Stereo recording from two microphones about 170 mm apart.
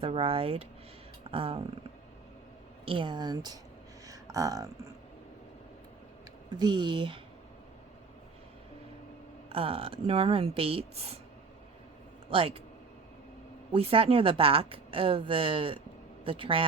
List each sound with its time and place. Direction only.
0.0 s speech: 35° right (ahead or behind)
2.8 s speech: 30° right (ahead or behind)
4.0 s a sound: 20° right (ahead or behind)
6.5 s speech: 25° right (ahead or behind)
9.5 s speech: 35° right (ahead or behind)
12.3 s speech: 35° right (ahead or behind)
13.7 s speech: 35° right (ahead or behind)